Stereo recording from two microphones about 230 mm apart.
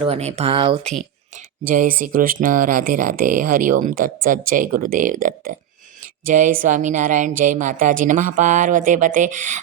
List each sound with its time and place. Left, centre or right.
0.0 s speech: right
1.6 s a woman's voice: right